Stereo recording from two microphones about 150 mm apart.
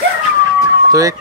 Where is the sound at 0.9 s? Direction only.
25° right (ahead or behind).